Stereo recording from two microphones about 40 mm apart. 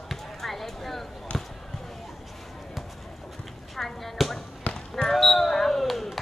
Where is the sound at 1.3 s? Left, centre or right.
Left.